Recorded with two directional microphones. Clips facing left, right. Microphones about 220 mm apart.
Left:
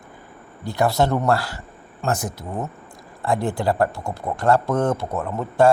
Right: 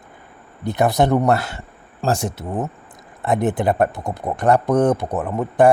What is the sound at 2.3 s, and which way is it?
Speech, 20° right (ahead or behind).